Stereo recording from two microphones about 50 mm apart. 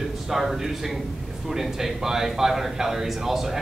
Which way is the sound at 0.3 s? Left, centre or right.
Centre.